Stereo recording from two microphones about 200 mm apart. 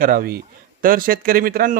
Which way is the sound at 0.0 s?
45° right (ahead or behind).